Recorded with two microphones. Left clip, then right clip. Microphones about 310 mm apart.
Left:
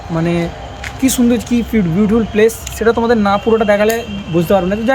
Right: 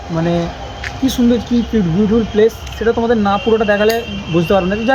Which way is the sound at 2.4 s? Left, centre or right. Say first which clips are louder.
Left 1 dB; centre.